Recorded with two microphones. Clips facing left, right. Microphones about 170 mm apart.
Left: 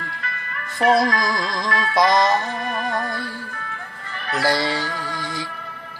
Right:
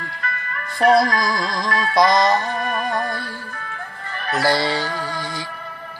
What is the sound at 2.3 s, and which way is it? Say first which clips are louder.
Music: right 2 dB; 45° right (ahead or behind).